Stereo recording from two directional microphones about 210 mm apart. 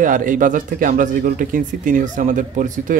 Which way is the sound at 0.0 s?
40° right (ahead or behind).